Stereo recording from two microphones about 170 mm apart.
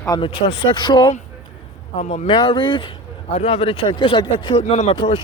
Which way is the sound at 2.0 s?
40° left (ahead or behind).